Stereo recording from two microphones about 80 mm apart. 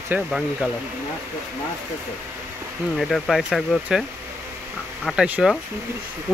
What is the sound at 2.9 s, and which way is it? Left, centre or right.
Speech, centre.